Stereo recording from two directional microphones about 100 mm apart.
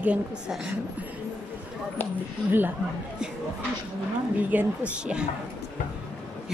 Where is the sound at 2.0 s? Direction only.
20° left (ahead or behind).